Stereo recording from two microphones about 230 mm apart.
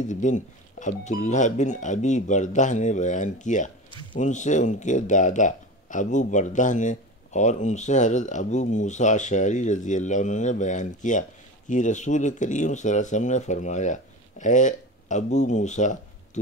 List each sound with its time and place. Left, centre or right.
0.0 s speech: left